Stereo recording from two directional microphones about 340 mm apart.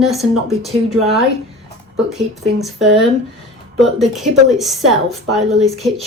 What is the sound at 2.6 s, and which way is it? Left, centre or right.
A woman's voice, centre.